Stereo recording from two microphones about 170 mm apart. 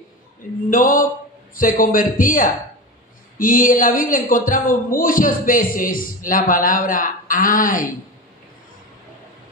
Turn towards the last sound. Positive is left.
turn(degrees=55)  # may be behind; listen again after turning